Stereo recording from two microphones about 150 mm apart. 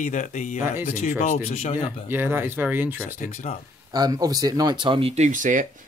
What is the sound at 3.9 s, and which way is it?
Speech, 25° right (ahead or behind).